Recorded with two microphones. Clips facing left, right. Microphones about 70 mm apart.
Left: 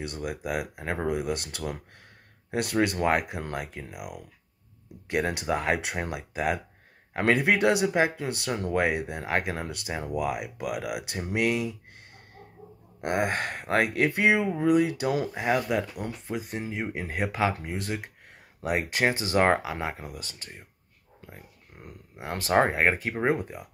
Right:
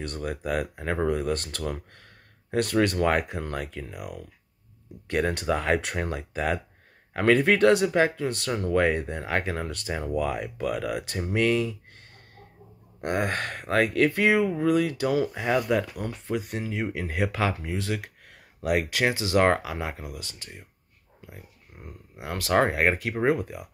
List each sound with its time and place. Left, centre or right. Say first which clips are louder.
0.0 s speech: right 2 dB; centre
13.0 s speech: even; left
16.6 s speech: right 2 dB; left
21.7 s speech: right 1 dB; centre
22.2 s speech: even; left